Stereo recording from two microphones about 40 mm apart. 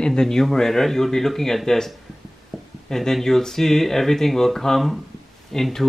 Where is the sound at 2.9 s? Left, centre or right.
Centre.